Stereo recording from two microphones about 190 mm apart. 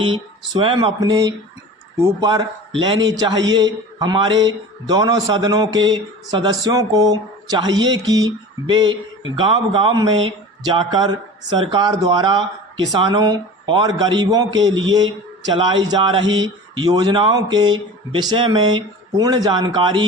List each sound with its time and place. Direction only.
0.0 s speech: 25° right (ahead or behind)
14.5 s a man's voice: 90° right
15.5 s speech: 25° right (ahead or behind)
16.2 s a sound: 85° right
16.7 s speech: 20° right (ahead or behind)